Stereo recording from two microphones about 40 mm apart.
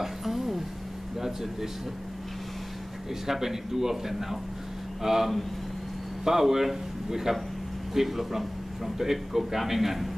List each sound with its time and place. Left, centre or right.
0.0 s a sound: centre
1.2 s speech: centre
3.3 s speech: centre